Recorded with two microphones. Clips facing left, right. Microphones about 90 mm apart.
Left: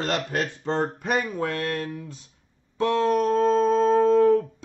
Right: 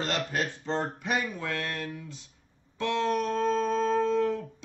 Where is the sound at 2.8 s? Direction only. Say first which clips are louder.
Left 6 dB; 40° left (ahead or behind).